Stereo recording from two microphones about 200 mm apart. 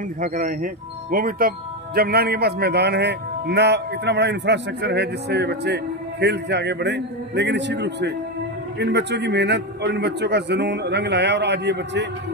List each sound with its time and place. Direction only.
0.2 s a man's voice: 40° right (ahead or behind); by 12.1 s 60° right (ahead or behind)